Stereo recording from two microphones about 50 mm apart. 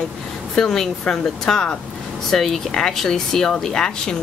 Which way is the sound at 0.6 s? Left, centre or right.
Centre.